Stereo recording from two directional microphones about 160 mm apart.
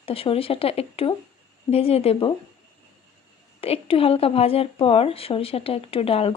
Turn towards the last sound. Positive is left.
turn(degrees=35)  # may be behind; listen again after turning